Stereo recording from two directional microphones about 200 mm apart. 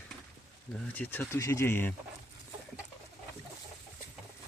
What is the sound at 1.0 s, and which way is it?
Speech, 10° left (ahead or behind).